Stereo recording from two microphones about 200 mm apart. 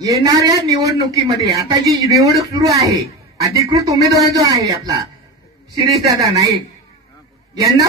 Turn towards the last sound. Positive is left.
turn(degrees=-15)  # may be behind; listen again after turning